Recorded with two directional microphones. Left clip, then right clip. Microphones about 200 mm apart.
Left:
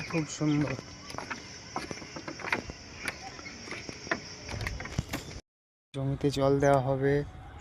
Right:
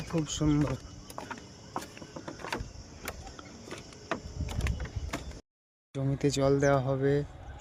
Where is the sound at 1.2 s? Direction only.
Centre (ahead or behind).